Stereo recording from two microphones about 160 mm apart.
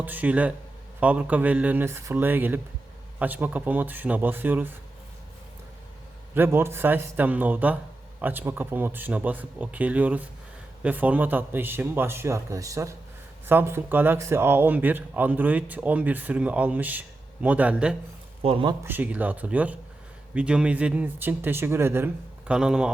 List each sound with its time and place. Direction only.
0.0 s speech: 10° right (ahead or behind)
6.3 s speech: 15° right (ahead or behind)
18.4 s speech: 35° right (ahead or behind)
18.9 s speech: 10° right (ahead or behind)